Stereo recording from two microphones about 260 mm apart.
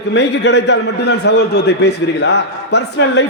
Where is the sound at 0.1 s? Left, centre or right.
Left.